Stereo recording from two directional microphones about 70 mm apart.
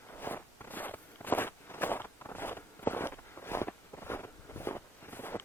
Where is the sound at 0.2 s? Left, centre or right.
Left.